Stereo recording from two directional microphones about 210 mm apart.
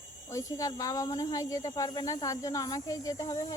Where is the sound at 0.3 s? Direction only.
15° left (ahead or behind).